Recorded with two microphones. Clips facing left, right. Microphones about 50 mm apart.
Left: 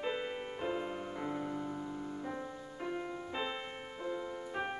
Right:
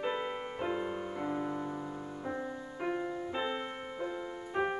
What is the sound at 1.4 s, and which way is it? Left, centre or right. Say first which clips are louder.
Music: right 2 dB; right.